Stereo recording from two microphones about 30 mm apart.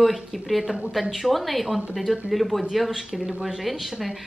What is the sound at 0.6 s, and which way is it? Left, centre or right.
Speech, centre.